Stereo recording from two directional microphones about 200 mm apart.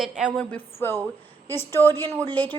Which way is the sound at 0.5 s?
10° left (ahead or behind).